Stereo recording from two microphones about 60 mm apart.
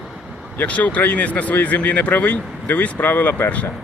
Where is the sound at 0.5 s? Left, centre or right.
Left.